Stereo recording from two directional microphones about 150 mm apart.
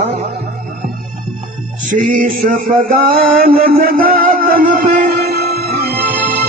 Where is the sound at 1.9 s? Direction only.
60° right (ahead or behind).